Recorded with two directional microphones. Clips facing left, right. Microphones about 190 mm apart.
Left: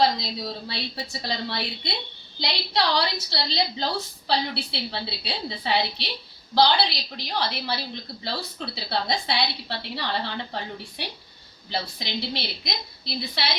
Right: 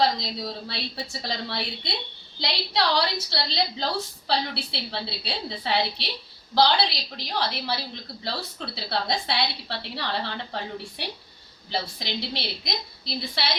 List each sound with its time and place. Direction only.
0.2 s a woman's voice: centre (ahead or behind)